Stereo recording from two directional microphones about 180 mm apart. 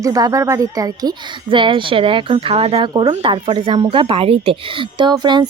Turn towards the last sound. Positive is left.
turn(degrees=-25)  # may be behind; listen again after turning